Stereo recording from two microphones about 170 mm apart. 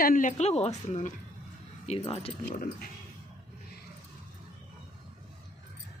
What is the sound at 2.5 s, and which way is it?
Speech, 60° left (ahead or behind).